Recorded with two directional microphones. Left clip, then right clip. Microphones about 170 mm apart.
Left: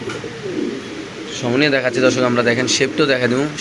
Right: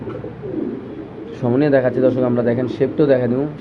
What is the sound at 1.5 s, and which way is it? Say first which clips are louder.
Speech: right 1 dB; 15° right (ahead or behind).